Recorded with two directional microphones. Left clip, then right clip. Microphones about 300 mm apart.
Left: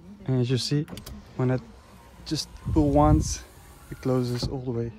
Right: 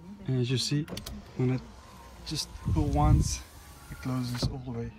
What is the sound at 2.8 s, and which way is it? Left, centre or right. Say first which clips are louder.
Speech: left 9 dB; left.